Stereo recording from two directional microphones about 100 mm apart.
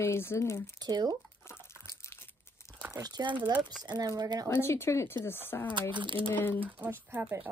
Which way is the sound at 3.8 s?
45° right (ahead or behind).